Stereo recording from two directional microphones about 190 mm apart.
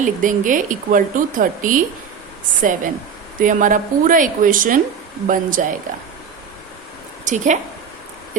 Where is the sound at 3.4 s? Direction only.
45° right (ahead or behind).